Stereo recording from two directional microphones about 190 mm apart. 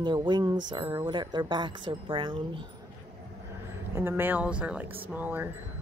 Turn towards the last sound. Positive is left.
turn(degrees=-10)  # may be behind; listen again after turning